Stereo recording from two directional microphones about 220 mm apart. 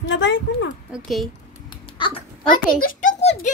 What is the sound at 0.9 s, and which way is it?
Speech, centre (ahead or behind).